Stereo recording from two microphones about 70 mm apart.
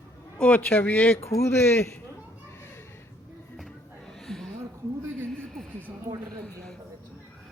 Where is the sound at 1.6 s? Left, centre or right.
Left.